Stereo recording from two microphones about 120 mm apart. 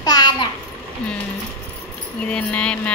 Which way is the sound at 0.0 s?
35° left (ahead or behind).